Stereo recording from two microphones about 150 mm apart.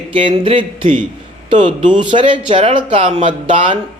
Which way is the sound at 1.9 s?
35° right (ahead or behind).